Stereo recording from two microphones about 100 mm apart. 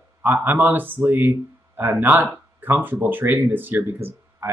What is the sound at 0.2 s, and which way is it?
Speech, 20° right (ahead or behind).